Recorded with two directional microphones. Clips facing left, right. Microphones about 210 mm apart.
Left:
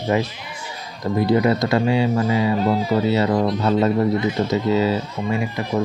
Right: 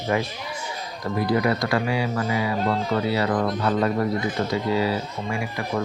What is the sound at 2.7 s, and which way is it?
Speech, 5° left (ahead or behind).